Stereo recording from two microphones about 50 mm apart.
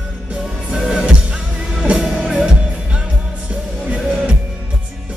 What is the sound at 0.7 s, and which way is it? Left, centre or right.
Music, centre.